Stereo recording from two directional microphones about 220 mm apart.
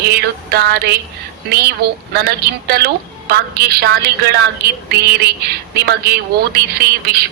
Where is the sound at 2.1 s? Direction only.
45° right (ahead or behind).